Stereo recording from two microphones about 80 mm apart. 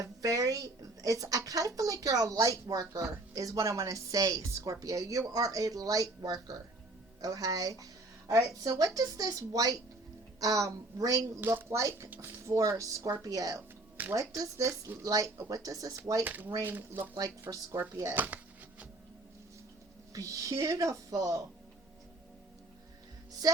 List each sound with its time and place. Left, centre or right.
0.0 s a woman's voice: right
11.3 s speech: right
11.7 s a woman's voice: right
15.0 s a woman's voice: right
16.2 s speech: right
20.1 s a woman's voice: right